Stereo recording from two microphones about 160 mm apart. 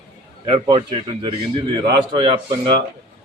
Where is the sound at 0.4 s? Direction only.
30° right (ahead or behind).